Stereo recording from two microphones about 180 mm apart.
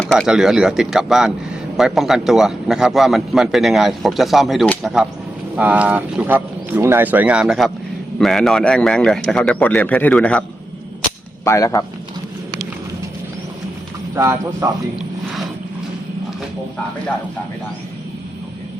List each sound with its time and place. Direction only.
0.0 s a man's voice: centre (ahead or behind)
11.4 s speech: 15° left (ahead or behind)
14.2 s speech: 15° right (ahead or behind)